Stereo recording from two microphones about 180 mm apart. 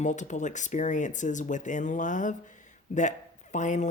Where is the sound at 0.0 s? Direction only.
40° left (ahead or behind).